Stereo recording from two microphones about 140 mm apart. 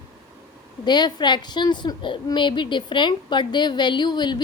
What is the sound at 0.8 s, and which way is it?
A woman's voice, 30° left (ahead or behind).